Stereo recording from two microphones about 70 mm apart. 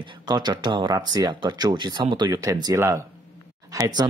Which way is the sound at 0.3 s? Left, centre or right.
Right.